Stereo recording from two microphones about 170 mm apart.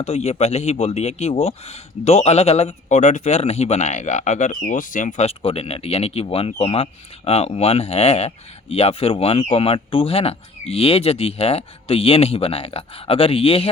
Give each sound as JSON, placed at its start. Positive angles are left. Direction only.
{"t": 0.0, "sound": "a man's voice", "side_deg": 40}